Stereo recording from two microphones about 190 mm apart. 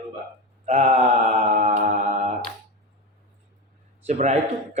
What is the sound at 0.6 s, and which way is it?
Mantra, 35° right (ahead or behind).